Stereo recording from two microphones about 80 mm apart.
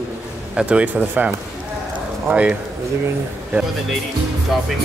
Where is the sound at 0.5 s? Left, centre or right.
Centre.